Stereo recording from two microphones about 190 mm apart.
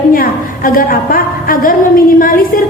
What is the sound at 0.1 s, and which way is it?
A woman's voice, 50° left (ahead or behind).